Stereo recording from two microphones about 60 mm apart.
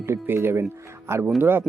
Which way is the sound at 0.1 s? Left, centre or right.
Right.